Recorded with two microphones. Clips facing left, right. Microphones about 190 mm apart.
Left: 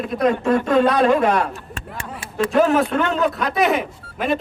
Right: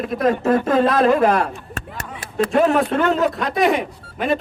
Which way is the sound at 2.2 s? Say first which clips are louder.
Even; 35° right (ahead or behind).